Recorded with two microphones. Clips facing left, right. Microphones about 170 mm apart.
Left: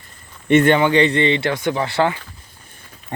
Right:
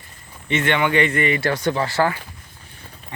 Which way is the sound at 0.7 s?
30° left (ahead or behind).